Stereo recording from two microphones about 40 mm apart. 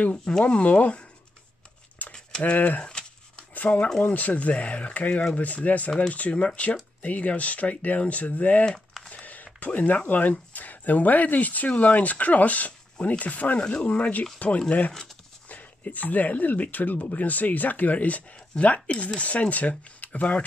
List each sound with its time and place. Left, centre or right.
0.2 s speech: left
2.1 s a sound: left
2.5 s speech: left
2.8 s a sound: left
3.5 s speech: left
18.3 s speech: left